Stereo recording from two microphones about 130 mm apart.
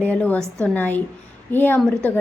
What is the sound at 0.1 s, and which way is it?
A woman's voice, 10° left (ahead or behind).